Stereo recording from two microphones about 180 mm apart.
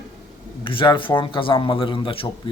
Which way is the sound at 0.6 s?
30° left (ahead or behind).